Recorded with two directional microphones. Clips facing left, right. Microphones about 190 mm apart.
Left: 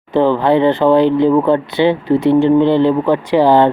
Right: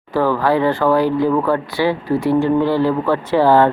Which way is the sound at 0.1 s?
20° left (ahead or behind).